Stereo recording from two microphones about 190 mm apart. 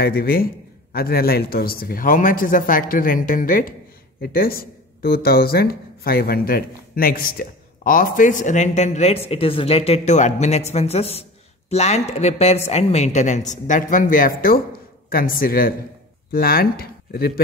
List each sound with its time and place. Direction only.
0.0 s speech: 50° left (ahead or behind)